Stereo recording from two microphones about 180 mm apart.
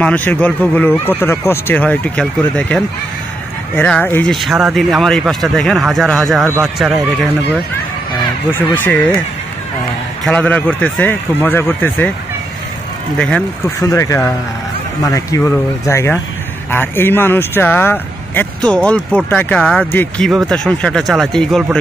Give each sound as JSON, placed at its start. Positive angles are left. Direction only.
{"t": 0.0, "sound": "speech", "side_deg": 10}
{"t": 6.4, "sound": "a man's voice", "side_deg": -15}
{"t": 8.5, "sound": "speech", "side_deg": 10}
{"t": 10.2, "sound": "speech", "side_deg": 5}
{"t": 13.7, "sound": "speech", "side_deg": 20}